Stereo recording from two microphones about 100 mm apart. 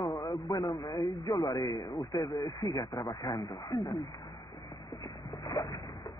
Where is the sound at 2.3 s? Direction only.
45° left (ahead or behind).